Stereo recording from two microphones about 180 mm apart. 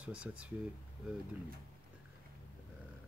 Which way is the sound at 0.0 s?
5° right (ahead or behind).